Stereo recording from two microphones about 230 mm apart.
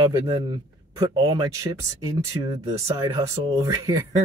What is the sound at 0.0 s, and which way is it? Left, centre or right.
A man's voice, centre.